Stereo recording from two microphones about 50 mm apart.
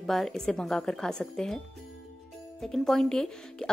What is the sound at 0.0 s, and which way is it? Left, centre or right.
Speech, centre.